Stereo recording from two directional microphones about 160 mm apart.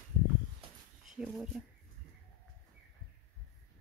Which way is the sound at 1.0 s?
5° right (ahead or behind).